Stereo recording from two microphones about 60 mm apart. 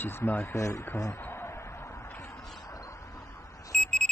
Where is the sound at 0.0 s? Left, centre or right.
Left.